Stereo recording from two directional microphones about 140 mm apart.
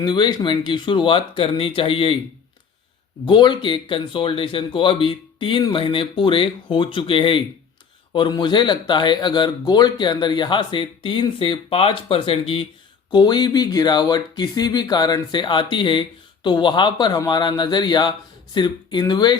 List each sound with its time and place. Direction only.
0.0 s speech: 30° left (ahead or behind)
3.2 s speech: 35° left (ahead or behind)